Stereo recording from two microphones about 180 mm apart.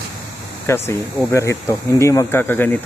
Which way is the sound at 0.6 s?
15° left (ahead or behind).